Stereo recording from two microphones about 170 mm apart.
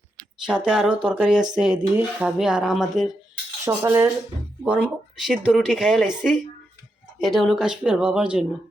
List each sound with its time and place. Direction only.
0.4 s speech: 5° right (ahead or behind)
3.6 s cutlery: 15° right (ahead or behind)
4.6 s speech: 5° right (ahead or behind)